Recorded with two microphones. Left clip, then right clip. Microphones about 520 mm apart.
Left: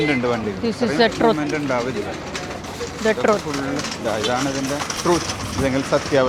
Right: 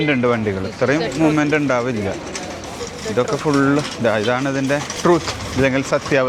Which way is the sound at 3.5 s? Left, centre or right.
Right.